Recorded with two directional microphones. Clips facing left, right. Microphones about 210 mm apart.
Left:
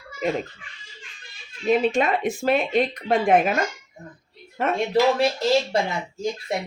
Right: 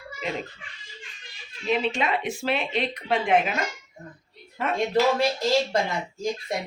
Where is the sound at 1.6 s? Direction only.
45° left (ahead or behind).